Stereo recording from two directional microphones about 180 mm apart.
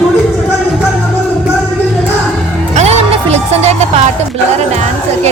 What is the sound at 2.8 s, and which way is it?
Music, 35° right (ahead or behind).